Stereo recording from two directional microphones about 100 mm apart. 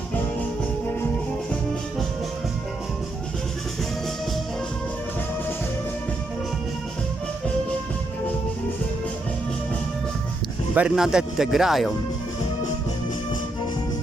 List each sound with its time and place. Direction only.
10.8 s a man's voice: 5° right (ahead or behind)